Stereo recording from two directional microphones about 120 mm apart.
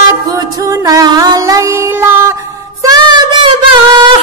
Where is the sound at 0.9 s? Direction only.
30° right (ahead or behind).